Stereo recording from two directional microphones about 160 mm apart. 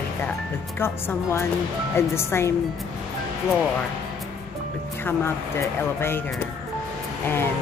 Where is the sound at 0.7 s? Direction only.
15° left (ahead or behind).